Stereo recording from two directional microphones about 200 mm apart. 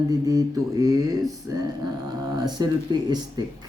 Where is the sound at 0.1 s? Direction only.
20° right (ahead or behind).